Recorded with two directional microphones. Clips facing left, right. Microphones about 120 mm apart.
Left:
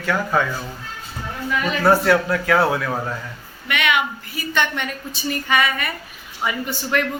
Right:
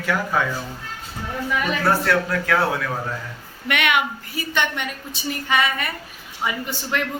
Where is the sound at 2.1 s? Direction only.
5° left (ahead or behind).